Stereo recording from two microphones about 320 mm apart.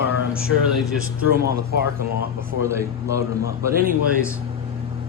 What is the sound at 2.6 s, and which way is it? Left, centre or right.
Speech, centre.